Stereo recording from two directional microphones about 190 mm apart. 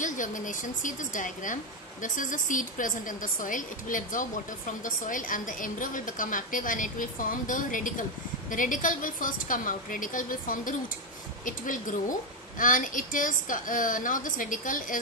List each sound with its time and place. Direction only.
0.0 s a woman's voice: 45° left (ahead or behind)